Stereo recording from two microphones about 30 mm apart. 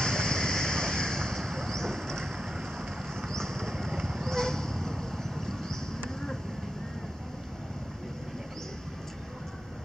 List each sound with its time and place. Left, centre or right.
0.0 s waves: centre
1.4 s vehicle: centre
5.3 s a sound: centre